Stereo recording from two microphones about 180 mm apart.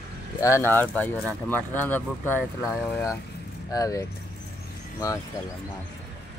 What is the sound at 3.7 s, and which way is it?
Speech, 20° left (ahead or behind).